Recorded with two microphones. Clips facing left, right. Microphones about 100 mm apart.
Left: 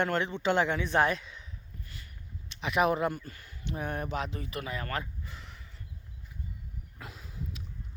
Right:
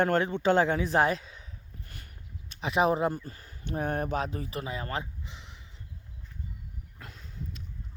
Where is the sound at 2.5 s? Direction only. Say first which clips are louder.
Right 2 dB; 30° right (ahead or behind).